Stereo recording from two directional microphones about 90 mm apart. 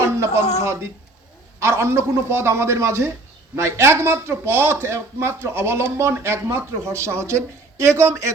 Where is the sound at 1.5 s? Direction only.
30° right (ahead or behind).